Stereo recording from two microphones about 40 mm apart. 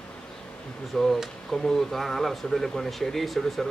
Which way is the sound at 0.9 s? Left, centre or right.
Centre.